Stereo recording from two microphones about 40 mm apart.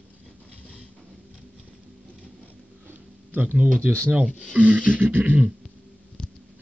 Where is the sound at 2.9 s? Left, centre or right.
Right.